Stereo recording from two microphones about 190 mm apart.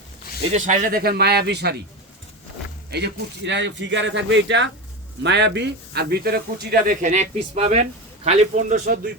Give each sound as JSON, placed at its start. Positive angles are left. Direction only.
{"t": 0.5, "sound": "speech", "side_deg": -40}
{"t": 2.9, "sound": "speech", "side_deg": -65}